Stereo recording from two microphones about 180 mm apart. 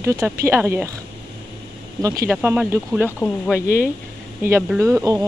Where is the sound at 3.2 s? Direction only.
10° left (ahead or behind).